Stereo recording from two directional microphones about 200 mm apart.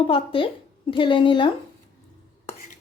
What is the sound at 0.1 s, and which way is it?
Speech, 25° left (ahead or behind).